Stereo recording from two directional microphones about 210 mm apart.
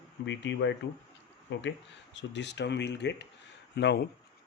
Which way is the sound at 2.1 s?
55° left (ahead or behind).